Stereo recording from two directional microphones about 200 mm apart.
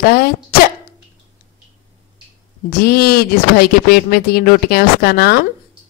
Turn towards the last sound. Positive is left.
turn(degrees=50)  # may be behind; listen again after turning